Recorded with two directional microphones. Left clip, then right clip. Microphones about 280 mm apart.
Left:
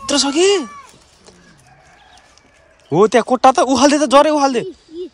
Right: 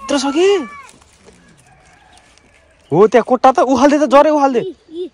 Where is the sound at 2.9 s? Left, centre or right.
Centre.